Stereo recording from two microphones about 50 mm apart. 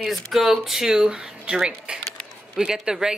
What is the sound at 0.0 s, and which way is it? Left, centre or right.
Speech, centre.